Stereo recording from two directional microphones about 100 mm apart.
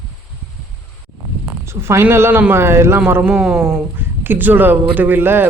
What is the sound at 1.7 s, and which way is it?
Speech, 25° right (ahead or behind).